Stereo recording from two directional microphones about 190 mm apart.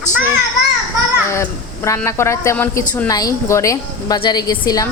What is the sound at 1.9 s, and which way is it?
A woman's voice, 15° left (ahead or behind).